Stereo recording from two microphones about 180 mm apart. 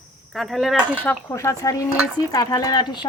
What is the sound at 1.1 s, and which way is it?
Speech, 15° left (ahead or behind).